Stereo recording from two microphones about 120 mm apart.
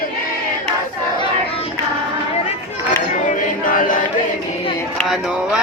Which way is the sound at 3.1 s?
90° left.